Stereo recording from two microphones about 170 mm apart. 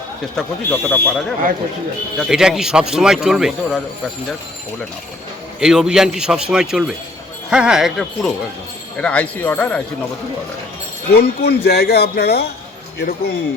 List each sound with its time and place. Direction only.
0.3 s speech: 10° left (ahead or behind)
2.1 s speech: 5° right (ahead or behind)
5.5 s speech: 5° right (ahead or behind)
11.1 s speech: 70° left (ahead or behind)